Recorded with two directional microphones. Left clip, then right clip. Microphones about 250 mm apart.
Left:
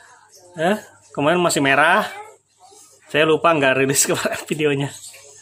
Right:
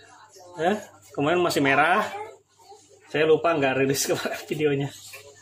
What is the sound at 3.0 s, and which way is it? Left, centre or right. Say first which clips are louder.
Mantra: left 5 dB; left.